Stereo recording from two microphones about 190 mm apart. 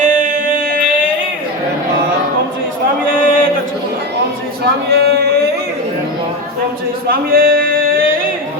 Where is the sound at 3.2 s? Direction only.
45° right (ahead or behind).